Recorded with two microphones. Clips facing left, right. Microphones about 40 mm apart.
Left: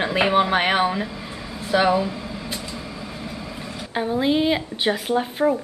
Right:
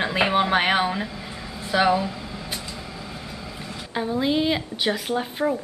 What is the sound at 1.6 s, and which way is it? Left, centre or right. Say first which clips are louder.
Vehicle: left 1 dB; centre.